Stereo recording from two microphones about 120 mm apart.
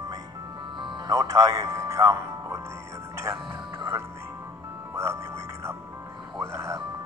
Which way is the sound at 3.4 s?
40° right (ahead or behind).